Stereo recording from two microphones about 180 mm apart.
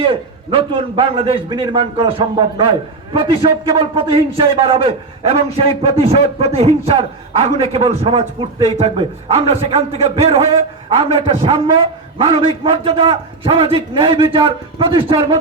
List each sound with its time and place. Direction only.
0.0 s a man's voice: 30° right (ahead or behind)